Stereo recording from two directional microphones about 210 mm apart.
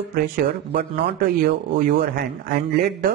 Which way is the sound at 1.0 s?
45° right (ahead or behind).